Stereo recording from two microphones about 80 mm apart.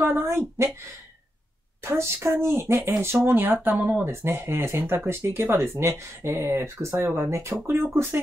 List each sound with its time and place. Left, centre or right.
0.0 s speech: right
1.8 s a woman's voice: right